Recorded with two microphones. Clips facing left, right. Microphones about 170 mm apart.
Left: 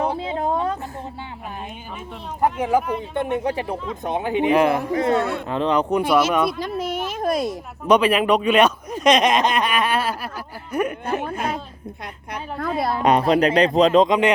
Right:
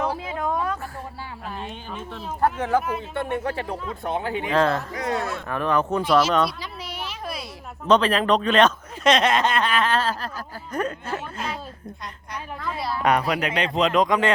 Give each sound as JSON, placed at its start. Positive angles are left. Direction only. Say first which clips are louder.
{"t": 0.0, "sound": "a sound", "louder": "left 3 dB", "side_deg": 30}
{"t": 2.4, "sound": "speech", "louder": "left 2 dB", "side_deg": 10}
{"t": 4.9, "sound": "speech", "louder": "left 7 dB", "side_deg": 25}
{"t": 6.6, "sound": "a sound", "louder": "left 10 dB", "side_deg": 50}
{"t": 7.9, "sound": "speech", "louder": "left 2 dB", "side_deg": 10}
{"t": 11.2, "sound": "a woman's voice", "louder": "left 6 dB", "side_deg": 55}
{"t": 13.0, "sound": "speech", "louder": "left 5 dB", "side_deg": 20}